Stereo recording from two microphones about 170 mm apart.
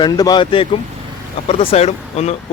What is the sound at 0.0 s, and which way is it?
Speech, 25° left (ahead or behind).